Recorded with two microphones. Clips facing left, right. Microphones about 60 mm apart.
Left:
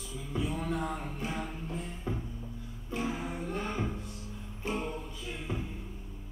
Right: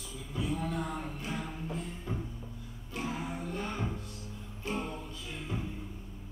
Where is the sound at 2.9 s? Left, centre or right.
Left.